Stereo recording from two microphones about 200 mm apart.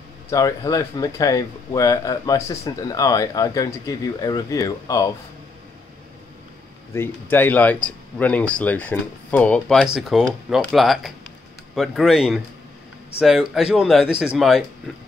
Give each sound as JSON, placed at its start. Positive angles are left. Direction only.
{"t": 0.3, "sound": "speech", "side_deg": 15}
{"t": 6.9, "sound": "speech", "side_deg": 10}